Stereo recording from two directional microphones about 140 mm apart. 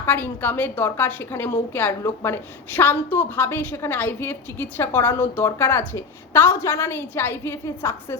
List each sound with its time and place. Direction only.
0.0 s a woman's voice: 15° left (ahead or behind)